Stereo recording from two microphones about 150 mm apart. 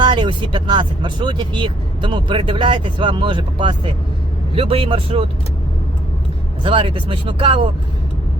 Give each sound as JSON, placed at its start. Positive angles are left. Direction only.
{"t": 0.0, "sound": "speech", "side_deg": -30}
{"t": 6.6, "sound": "speech", "side_deg": -35}